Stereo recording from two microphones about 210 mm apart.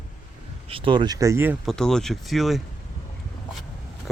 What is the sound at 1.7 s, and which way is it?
Speech, 5° left (ahead or behind).